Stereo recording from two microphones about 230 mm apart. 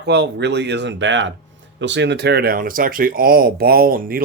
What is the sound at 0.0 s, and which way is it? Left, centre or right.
Speech, right.